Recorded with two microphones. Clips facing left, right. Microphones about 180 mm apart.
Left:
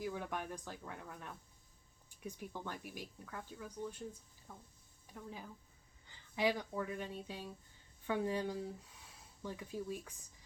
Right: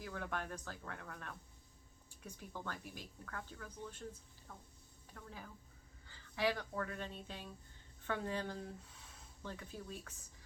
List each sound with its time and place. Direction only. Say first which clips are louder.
0.0 s speech: left 2 dB; 15° left (ahead or behind)